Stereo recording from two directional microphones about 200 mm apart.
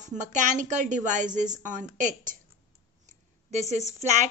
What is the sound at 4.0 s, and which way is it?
Speech, 35° right (ahead or behind).